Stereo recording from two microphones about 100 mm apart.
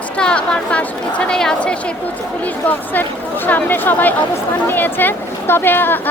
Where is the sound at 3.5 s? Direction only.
20° left (ahead or behind).